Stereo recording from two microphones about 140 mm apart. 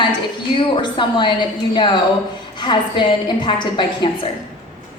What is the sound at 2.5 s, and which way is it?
A woman's voice, 35° left (ahead or behind).